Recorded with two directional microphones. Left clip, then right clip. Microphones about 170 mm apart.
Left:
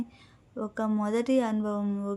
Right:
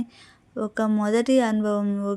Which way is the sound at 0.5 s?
35° right (ahead or behind).